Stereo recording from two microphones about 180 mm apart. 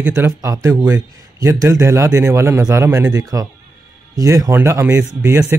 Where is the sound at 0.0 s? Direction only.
10° right (ahead or behind).